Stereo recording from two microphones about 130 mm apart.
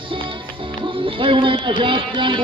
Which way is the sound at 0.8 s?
40° right (ahead or behind).